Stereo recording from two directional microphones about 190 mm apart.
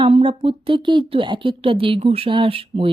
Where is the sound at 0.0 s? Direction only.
30° right (ahead or behind).